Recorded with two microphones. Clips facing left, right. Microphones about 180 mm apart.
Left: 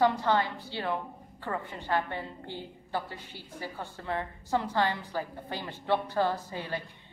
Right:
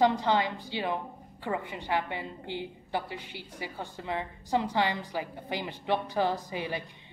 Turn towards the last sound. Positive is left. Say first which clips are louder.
# right 2 dB
turn(degrees=-15)  # may be behind; listen again after turning